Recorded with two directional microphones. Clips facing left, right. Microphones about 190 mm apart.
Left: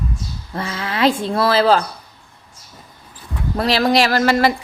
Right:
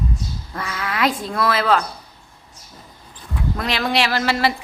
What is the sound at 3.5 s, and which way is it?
Speech, 35° left (ahead or behind).